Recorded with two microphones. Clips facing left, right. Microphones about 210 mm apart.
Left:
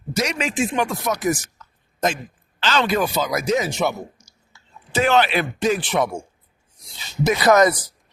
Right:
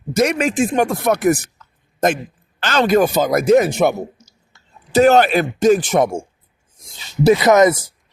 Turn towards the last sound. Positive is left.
turn(degrees=-25)  # may be behind; listen again after turning